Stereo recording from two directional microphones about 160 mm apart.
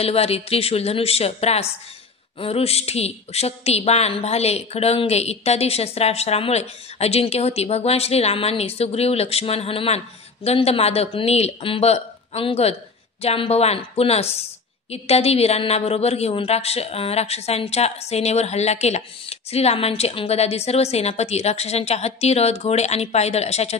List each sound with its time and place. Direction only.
0.0 s a woman's voice: 40° left (ahead or behind)